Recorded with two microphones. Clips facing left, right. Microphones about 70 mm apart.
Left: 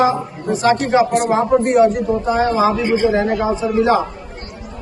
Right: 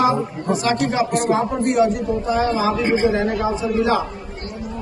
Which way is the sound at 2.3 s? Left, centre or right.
Left.